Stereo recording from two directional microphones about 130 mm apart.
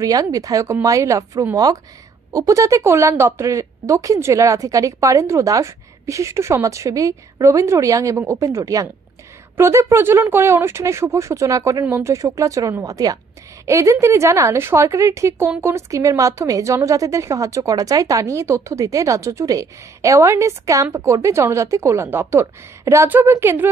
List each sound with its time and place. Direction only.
0.0 s a woman's voice: 25° right (ahead or behind)